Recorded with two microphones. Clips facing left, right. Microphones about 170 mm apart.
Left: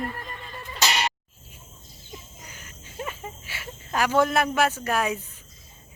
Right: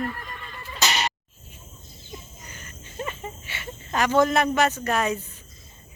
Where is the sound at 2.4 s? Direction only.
10° left (ahead or behind).